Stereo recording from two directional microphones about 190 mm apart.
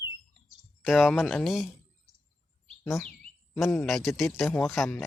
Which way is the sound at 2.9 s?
15° left (ahead or behind).